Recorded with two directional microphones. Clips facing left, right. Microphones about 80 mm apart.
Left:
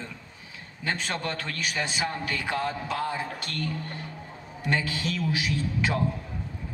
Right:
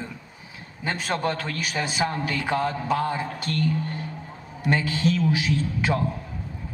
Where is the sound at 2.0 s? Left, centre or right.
Right.